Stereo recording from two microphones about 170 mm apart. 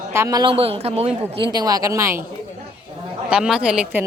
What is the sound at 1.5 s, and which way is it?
Speech, 20° right (ahead or behind).